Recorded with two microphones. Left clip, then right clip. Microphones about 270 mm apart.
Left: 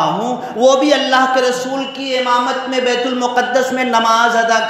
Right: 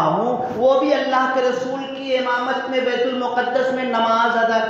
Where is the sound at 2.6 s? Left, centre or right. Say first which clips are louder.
Left 4 dB; left.